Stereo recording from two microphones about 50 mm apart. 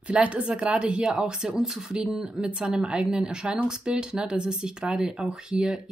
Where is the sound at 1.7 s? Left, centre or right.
Right.